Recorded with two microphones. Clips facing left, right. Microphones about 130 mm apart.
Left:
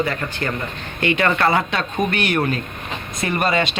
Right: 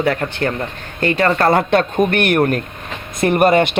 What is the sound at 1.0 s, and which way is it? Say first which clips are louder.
Speech: right 3 dB; 35° right (ahead or behind).